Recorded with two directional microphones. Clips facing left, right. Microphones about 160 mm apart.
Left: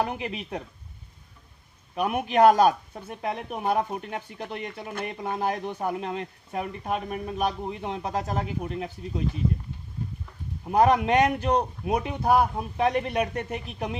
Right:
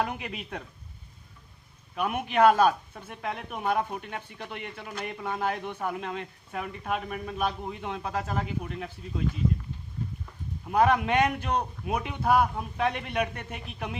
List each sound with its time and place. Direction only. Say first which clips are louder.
0.0 s speech: left 3 dB; 30° left (ahead or behind)
2.0 s speech: left 3 dB; 35° left (ahead or behind)
10.7 s speech: left 3 dB; 35° left (ahead or behind)